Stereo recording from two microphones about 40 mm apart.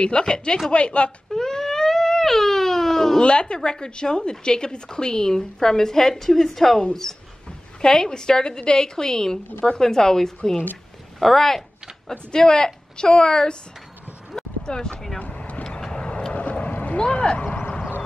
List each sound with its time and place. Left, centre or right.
0.0 s a woman's voice: left
1.3 s a sound: centre
3.3 s a woman's voice: left
14.7 s a woman's voice: left
15.1 s vehicle: left
15.6 s vehicle: centre
16.3 s vehicle: left
16.8 s a sound: left